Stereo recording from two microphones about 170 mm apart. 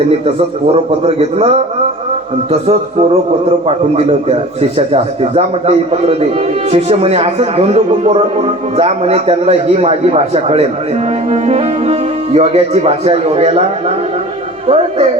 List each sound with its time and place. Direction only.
1.0 s speech: 35° right (ahead or behind)
4.9 s speech: 40° right (ahead or behind)
14.7 s speech: 35° right (ahead or behind)